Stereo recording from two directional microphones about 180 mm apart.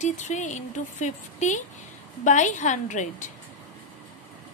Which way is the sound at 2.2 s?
45° left (ahead or behind).